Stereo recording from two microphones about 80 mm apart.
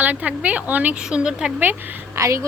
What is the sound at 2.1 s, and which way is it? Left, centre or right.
Speech, right.